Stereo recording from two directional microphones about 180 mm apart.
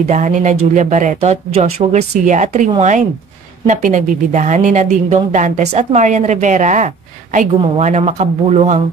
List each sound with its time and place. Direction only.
0.1 s a woman's voice: 45° right (ahead or behind)